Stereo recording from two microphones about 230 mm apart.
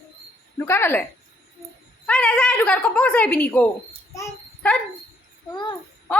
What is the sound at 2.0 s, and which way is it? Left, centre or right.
A woman's voice, centre.